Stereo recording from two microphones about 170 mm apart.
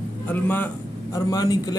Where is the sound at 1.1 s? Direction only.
20° left (ahead or behind).